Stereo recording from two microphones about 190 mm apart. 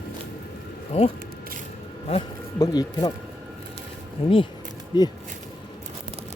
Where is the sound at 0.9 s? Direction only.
35° left (ahead or behind).